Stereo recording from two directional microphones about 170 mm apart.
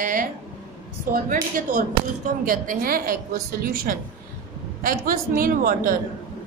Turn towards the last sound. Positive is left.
turn(degrees=-55)  # may be behind; listen again after turning